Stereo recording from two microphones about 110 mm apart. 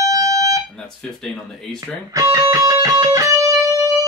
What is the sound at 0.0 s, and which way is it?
Fire alarm, 30° right (ahead or behind).